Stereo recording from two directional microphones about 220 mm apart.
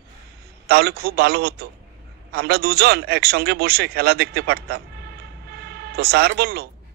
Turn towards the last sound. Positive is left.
turn(degrees=-45)  # may be behind; listen again after turning